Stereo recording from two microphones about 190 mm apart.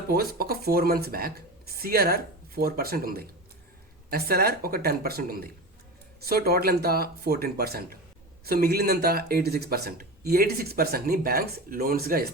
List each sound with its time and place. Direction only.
0.1 s speech: 55° right (ahead or behind)